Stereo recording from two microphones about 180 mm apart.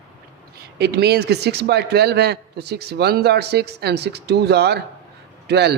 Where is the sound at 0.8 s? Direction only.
65° right (ahead or behind).